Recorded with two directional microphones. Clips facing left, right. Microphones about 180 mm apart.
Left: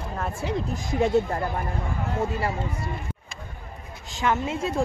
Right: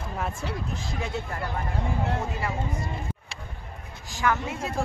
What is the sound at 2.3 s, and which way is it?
Speech, 30° left (ahead or behind).